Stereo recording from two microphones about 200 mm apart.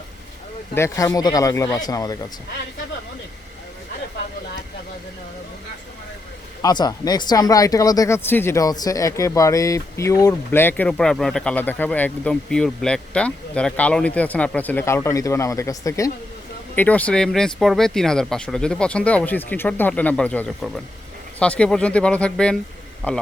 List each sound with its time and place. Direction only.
0.7 s speech: 15° left (ahead or behind)
6.6 s speech: 20° left (ahead or behind)